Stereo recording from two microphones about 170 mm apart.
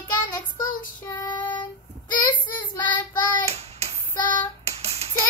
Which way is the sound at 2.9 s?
25° left (ahead or behind).